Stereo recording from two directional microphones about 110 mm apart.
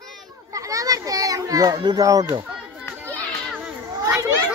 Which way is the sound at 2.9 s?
15° left (ahead or behind).